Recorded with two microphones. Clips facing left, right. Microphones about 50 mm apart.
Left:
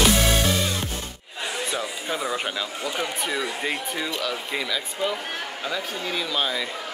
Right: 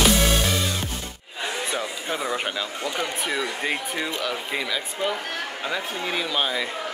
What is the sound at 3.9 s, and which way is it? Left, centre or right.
Speech, centre.